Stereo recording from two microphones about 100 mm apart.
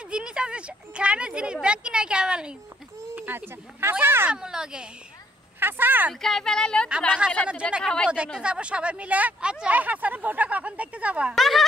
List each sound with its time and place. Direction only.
0.1 s speech: 10° right (ahead or behind)
3.2 s speech: 20° right (ahead or behind)
4.3 s speech: 5° right (ahead or behind)
5.6 s speech: 20° right (ahead or behind)
6.2 s speech: 5° left (ahead or behind)
7.1 s speech: 5° right (ahead or behind)
7.8 s a woman's voice: 10° left (ahead or behind)
8.1 s speech: 10° right (ahead or behind)
11.3 s speech: centre (ahead or behind)